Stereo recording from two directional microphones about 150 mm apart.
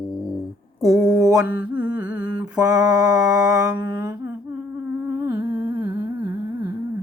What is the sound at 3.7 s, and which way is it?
Humming, 30° right (ahead or behind).